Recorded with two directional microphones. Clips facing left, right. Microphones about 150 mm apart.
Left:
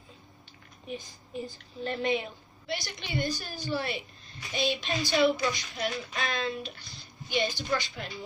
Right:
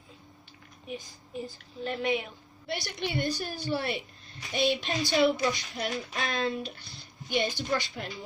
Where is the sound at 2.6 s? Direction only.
60° right (ahead or behind).